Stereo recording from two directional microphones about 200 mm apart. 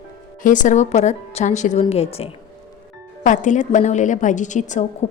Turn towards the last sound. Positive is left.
turn(degrees=35)  # may be behind; listen again after turning